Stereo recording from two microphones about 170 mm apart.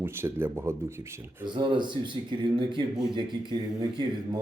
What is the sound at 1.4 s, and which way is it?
Speech, 25° right (ahead or behind).